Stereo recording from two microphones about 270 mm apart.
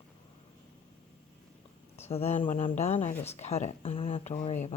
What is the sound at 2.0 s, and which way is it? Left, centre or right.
Speech, left.